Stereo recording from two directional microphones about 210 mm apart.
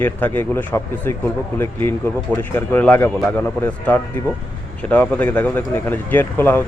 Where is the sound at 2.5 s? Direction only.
10° left (ahead or behind).